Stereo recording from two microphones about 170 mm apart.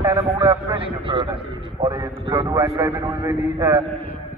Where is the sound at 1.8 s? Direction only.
20° right (ahead or behind).